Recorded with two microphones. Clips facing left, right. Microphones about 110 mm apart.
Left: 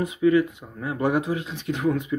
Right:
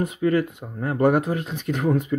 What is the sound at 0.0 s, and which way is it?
Speech, 45° right (ahead or behind).